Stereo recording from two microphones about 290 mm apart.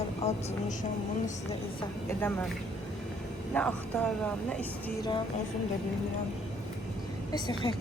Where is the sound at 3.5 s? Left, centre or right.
Centre.